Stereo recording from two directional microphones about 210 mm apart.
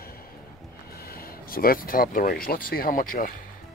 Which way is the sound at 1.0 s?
45° left (ahead or behind).